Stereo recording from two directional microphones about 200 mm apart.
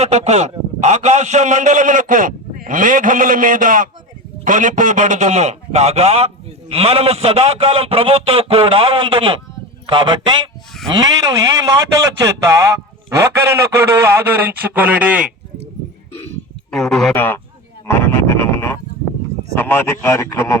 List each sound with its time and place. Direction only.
0.0 s a man's voice: 35° right (ahead or behind); by 15.3 s 5° right (ahead or behind)
16.7 s speech: centre (ahead or behind)
17.8 s a sound: 10° left (ahead or behind)
19.5 s a man's voice: 10° left (ahead or behind)